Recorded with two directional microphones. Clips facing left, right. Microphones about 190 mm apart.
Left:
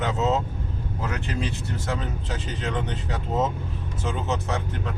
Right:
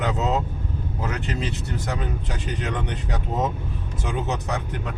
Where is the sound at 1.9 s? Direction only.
15° right (ahead or behind).